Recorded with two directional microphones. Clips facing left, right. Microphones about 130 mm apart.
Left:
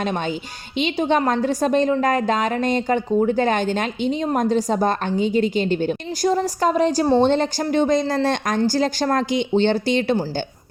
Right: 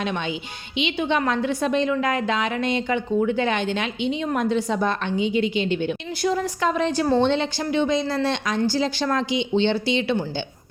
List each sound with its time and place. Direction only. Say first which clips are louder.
0.0 s a woman's voice: left 3 dB; 40° left (ahead or behind)